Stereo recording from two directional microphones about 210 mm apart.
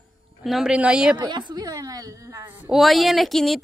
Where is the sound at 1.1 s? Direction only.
20° right (ahead or behind).